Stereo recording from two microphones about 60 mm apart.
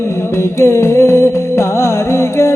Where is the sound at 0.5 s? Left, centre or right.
Left.